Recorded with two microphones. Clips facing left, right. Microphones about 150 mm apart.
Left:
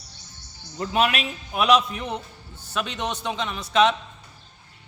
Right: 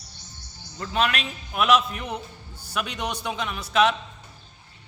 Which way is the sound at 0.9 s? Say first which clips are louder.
Left 2 dB; 10° left (ahead or behind).